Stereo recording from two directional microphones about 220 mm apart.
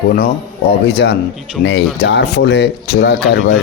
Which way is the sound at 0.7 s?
50° left (ahead or behind).